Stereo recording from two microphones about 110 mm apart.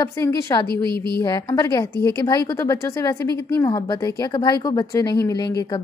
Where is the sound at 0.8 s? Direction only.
45° right (ahead or behind).